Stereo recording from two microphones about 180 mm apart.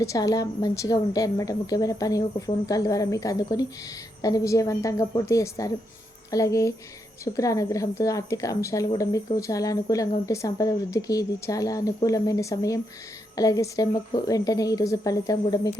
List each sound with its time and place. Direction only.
0.0 s a woman's voice: 20° left (ahead or behind)